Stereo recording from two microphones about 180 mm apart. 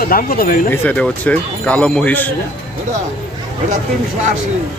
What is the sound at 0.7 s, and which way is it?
Speech, 10° left (ahead or behind).